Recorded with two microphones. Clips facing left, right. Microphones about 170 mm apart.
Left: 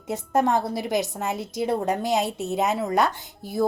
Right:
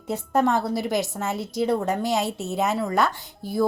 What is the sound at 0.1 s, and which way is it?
A woman's voice, 20° left (ahead or behind).